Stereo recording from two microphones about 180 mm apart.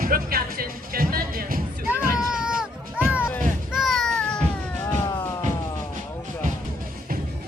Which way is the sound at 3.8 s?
Centre (ahead or behind).